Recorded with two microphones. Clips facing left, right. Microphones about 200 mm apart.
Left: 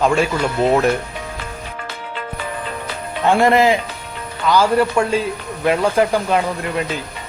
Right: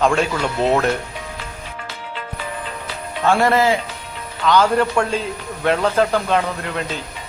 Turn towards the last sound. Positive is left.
turn(degrees=10)  # may be behind; listen again after turning